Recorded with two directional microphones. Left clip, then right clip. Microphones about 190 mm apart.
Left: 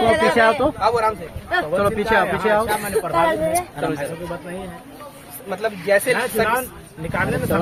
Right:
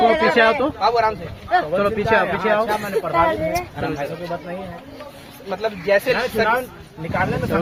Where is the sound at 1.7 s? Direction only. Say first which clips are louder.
Left 3 dB; 50° left (ahead or behind).